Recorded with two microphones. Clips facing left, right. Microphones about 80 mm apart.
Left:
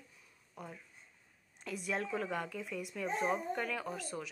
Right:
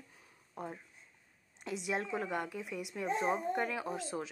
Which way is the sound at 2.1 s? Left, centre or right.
Centre.